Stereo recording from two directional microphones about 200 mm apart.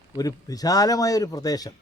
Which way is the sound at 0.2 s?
20° left (ahead or behind).